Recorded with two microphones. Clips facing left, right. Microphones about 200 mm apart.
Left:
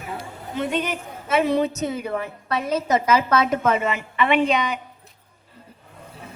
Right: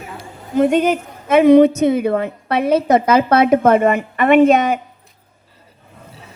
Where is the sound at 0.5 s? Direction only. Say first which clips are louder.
Right 11 dB; 50° right (ahead or behind).